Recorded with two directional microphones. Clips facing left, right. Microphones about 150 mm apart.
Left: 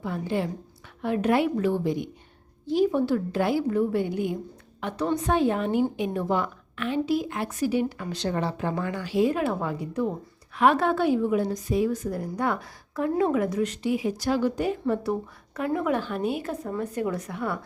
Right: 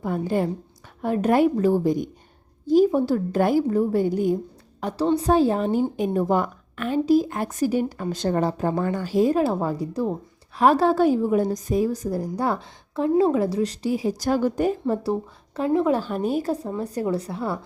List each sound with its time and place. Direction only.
0.0 s a woman's voice: 45° right (ahead or behind)